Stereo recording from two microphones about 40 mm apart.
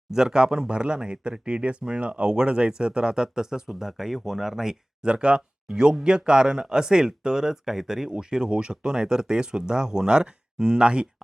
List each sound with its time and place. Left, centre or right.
0.1 s speech: centre
5.0 s speech: right